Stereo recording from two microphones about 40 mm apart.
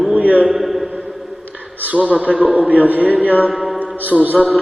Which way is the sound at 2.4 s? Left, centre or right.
Right.